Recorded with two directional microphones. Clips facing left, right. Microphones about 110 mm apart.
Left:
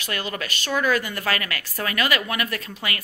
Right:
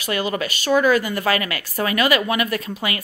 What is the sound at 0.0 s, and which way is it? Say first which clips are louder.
A woman's voice: right 7 dB; 15° right (ahead or behind).